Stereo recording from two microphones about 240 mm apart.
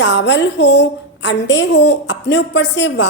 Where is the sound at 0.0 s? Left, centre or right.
Left.